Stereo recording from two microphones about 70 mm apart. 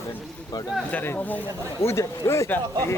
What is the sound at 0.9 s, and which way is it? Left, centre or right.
Speech, left.